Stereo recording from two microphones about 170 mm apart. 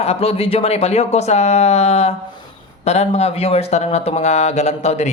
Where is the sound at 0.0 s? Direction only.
35° left (ahead or behind).